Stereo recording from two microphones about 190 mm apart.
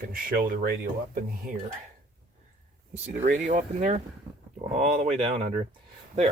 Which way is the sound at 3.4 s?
40° right (ahead or behind).